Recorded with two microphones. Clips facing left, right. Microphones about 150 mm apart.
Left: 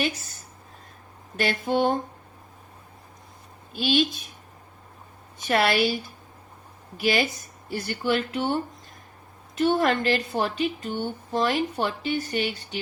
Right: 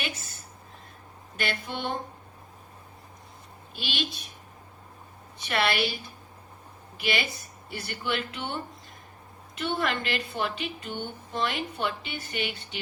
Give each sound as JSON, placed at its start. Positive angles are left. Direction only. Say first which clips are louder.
{"t": 1.4, "sound": "a woman's voice", "louder": "left 9 dB", "side_deg": 40}
{"t": 3.8, "sound": "a woman's voice", "louder": "left 11 dB", "side_deg": 45}
{"t": 5.5, "sound": "a woman's voice", "louder": "left 5 dB", "side_deg": 40}
{"t": 9.6, "sound": "a woman's voice", "louder": "left 8 dB", "side_deg": 40}